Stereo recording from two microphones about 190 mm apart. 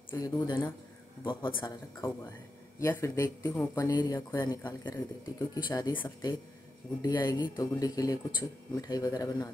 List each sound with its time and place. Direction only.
0.1 s speech: 20° left (ahead or behind)